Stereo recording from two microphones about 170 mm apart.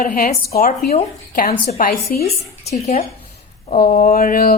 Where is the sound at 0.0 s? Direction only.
55° left (ahead or behind).